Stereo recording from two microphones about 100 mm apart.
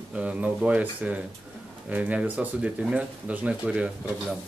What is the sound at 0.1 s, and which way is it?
Speech, 15° right (ahead or behind).